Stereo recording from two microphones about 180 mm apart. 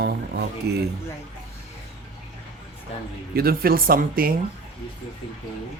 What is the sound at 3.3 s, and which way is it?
Speech, 55° right (ahead or behind).